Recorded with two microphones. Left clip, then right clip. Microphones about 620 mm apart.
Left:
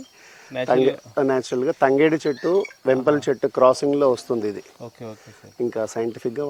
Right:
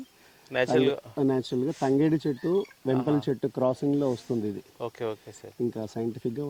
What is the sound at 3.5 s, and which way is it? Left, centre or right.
Speech, centre.